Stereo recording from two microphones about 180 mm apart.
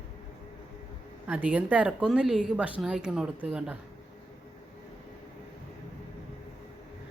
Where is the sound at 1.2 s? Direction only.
10° right (ahead or behind).